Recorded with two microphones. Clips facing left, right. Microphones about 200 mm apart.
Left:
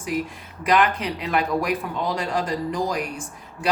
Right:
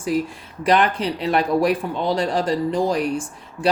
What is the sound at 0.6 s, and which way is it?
Speech, 30° right (ahead or behind).